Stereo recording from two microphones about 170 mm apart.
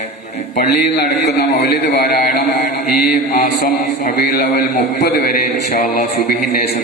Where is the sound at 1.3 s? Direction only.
70° left (ahead or behind).